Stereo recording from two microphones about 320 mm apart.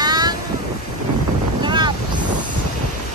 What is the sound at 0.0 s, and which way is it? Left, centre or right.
Boat, centre.